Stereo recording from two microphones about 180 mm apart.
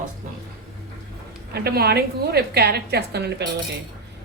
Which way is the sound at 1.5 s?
60° right (ahead or behind).